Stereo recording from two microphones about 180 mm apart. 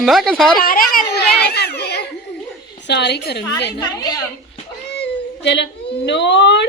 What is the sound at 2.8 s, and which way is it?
Speech, 70° left (ahead or behind).